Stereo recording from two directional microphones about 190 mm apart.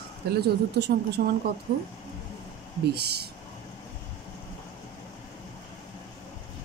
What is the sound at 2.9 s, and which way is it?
Speech, 60° right (ahead or behind).